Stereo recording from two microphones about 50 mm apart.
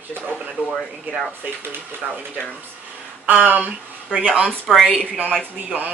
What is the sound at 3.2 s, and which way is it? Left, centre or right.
Speech, right.